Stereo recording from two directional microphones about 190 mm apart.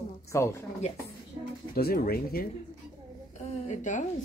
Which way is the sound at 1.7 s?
50° left (ahead or behind).